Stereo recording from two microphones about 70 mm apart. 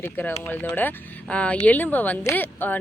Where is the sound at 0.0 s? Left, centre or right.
Left.